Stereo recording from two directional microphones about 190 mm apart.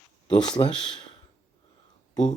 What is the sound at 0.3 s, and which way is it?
Speech, 25° left (ahead or behind).